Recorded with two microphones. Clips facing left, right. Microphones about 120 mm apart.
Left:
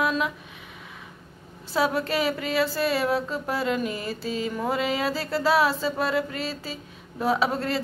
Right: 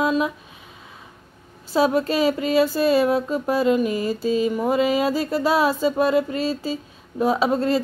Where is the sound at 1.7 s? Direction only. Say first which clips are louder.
Right 5 dB; 25° right (ahead or behind).